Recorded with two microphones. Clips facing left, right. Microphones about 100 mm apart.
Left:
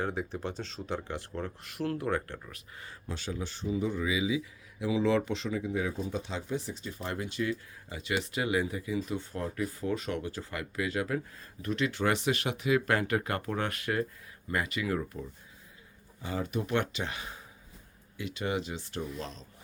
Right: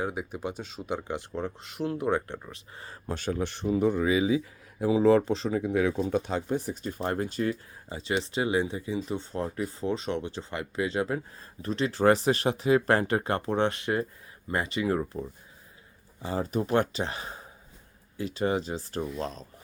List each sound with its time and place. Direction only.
0.0 s speech: 10° right (ahead or behind); by 3.0 s 35° right (ahead or behind)
3.1 s speech: 50° right (ahead or behind)
5.6 s speech: 65° right (ahead or behind); by 15.2 s 30° right (ahead or behind)
16.2 s speech: 35° right (ahead or behind)